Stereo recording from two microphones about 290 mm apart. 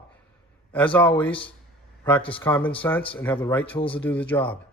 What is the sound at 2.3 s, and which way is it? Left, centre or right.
Speech, centre.